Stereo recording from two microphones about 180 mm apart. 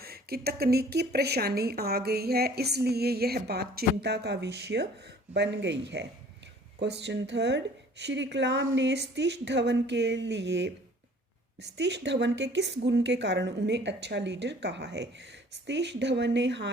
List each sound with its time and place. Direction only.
0.0 s a woman's voice: 60° right (ahead or behind); by 16.6 s 75° right (ahead or behind)